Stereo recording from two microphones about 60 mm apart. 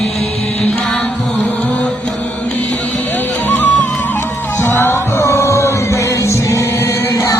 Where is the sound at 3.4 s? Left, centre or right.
Left.